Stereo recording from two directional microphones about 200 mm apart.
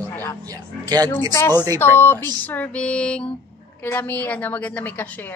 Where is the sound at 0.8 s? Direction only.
20° right (ahead or behind).